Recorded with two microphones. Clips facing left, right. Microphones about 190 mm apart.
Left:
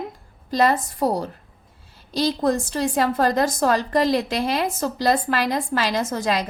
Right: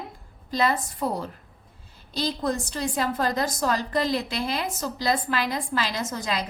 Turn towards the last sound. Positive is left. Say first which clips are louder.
# left 6 dB
turn(degrees=45)  # may be behind; listen again after turning